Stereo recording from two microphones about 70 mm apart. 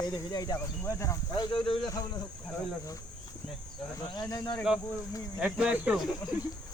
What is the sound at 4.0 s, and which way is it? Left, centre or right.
Speech, left.